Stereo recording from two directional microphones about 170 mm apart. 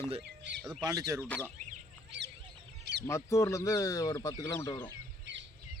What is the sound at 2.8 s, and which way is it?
Duck, 80° right.